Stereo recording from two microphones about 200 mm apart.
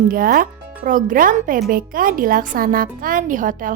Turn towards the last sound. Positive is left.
turn(degrees=-40)  # may be behind; listen again after turning